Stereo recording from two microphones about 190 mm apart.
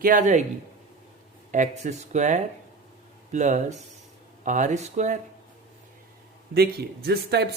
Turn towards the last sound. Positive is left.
turn(degrees=-60)  # may be behind; listen again after turning